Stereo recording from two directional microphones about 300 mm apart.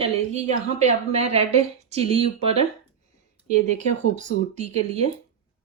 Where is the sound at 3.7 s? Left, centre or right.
Right.